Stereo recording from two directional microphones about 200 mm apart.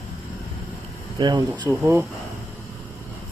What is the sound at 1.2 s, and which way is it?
Speech, 20° right (ahead or behind).